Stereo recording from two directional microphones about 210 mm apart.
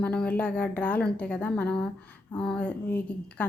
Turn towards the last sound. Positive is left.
turn(degrees=5)  # may be behind; listen again after turning